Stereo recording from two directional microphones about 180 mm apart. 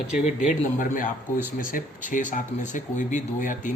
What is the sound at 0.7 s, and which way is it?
Speech, 45° left (ahead or behind).